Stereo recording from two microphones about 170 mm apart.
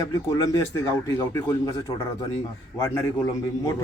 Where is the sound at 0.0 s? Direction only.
20° left (ahead or behind).